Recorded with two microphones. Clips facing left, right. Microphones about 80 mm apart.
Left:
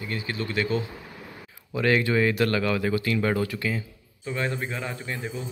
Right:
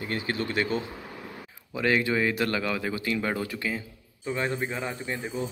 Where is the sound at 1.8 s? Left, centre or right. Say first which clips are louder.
Left 2 dB; centre.